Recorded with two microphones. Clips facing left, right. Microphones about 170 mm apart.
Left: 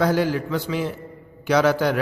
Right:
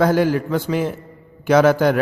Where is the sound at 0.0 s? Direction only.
50° right (ahead or behind).